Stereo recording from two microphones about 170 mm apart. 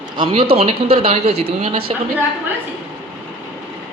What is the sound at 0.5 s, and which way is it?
Speech, 35° right (ahead or behind).